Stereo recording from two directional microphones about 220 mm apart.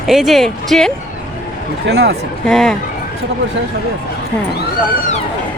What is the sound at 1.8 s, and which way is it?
Speech, 50° right (ahead or behind).